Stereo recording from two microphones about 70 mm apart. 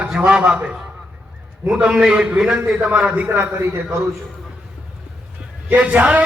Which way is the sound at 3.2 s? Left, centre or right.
Right.